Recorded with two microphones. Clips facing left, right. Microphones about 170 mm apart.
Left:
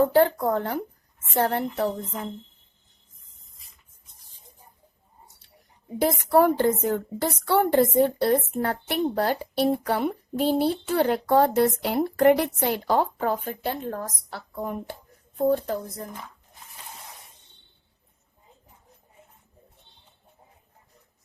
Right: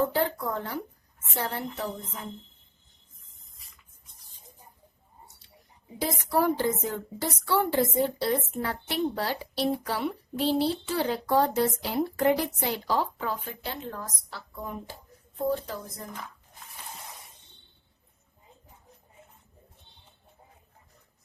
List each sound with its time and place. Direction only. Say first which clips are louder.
0.1 s a woman's voice: left 8 dB; 55° left (ahead or behind)
6.0 s a woman's voice: left 7 dB; 55° left (ahead or behind)